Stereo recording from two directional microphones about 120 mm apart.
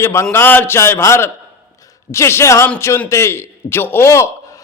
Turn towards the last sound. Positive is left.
turn(degrees=25)  # may be behind; listen again after turning